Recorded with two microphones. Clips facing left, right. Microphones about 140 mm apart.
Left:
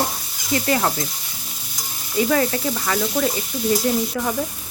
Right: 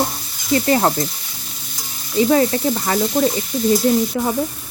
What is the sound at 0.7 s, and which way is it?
Frying, 35° right (ahead or behind).